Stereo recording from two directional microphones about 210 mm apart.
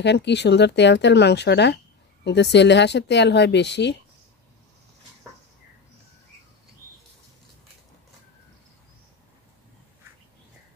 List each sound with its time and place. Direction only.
0.0 s speech: 55° left (ahead or behind)